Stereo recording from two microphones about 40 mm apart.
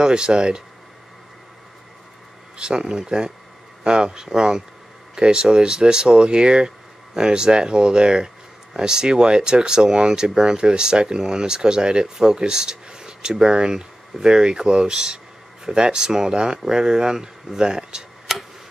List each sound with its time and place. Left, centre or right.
0.0 s speech: right
2.5 s speech: right
18.3 s tick-tock: centre